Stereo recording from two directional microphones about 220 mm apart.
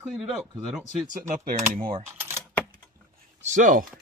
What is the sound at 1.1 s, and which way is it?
Speech, 40° right (ahead or behind).